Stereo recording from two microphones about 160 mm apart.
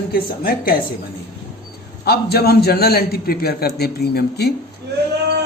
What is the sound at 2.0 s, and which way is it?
A man's voice, 80° left.